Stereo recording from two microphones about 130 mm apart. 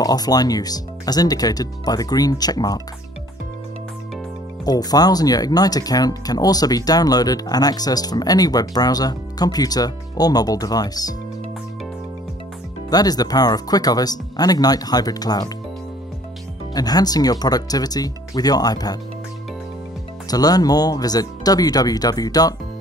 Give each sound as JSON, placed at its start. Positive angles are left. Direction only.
{"t": 0.0, "sound": "speech", "side_deg": 30}
{"t": 4.6, "sound": "speech", "side_deg": 30}
{"t": 12.9, "sound": "speech", "side_deg": 30}
{"t": 16.7, "sound": "speech", "side_deg": 30}
{"t": 20.2, "sound": "speech", "side_deg": 30}